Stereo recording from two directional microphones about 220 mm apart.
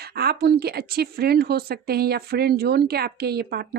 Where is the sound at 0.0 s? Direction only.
45° right (ahead or behind).